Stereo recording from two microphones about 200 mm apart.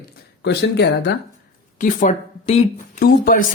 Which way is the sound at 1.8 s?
40° left (ahead or behind).